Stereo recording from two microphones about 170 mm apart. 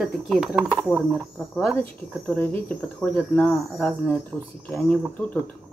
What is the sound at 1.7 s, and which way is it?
Speech, 10° left (ahead or behind).